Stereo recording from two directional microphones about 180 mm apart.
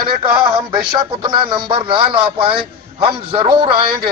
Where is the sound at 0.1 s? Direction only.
25° right (ahead or behind).